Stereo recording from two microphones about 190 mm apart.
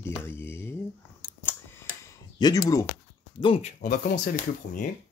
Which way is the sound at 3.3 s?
30° left (ahead or behind).